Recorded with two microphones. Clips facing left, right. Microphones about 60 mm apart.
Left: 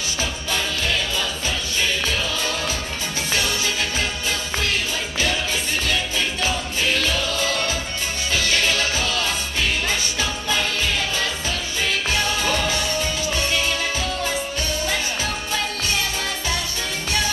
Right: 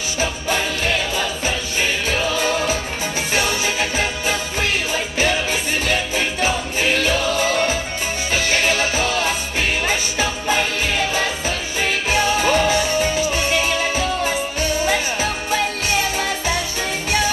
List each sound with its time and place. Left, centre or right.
0.2 s music: right